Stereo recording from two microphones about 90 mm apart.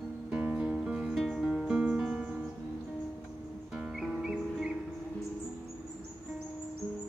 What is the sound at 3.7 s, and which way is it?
Music, 5° right (ahead or behind).